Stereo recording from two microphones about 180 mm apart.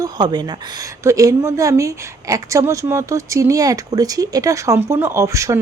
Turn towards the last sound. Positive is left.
turn(degrees=-15)  # may be behind; listen again after turning